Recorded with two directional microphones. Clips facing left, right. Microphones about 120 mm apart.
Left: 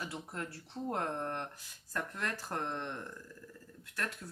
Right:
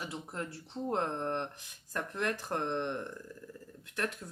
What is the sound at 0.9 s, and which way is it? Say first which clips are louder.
Speech: right 3 dB; 25° right (ahead or behind).